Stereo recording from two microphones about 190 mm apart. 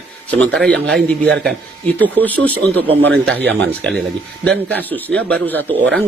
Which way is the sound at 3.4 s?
65° right (ahead or behind).